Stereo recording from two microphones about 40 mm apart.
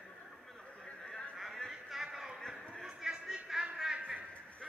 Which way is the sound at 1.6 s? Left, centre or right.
Centre.